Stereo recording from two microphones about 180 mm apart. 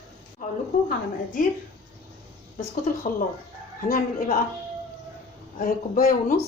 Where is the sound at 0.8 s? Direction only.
50° left (ahead or behind).